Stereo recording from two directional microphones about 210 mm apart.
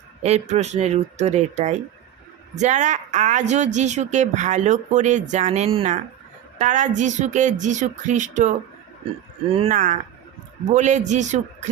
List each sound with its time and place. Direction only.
0.2 s a woman's voice: 30° right (ahead or behind)